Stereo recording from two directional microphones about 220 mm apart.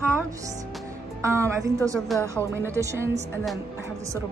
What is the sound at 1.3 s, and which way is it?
Speech, 10° right (ahead or behind).